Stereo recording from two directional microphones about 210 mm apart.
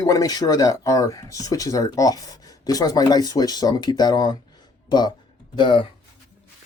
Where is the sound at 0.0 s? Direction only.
15° left (ahead or behind).